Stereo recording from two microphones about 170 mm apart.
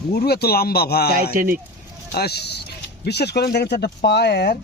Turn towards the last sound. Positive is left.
turn(degrees=70)  # may be behind; listen again after turning